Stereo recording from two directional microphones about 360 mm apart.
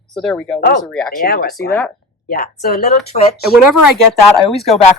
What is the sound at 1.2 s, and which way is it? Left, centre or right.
Speech, left.